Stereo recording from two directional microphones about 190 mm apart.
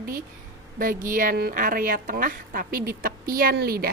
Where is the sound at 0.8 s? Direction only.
45° right (ahead or behind).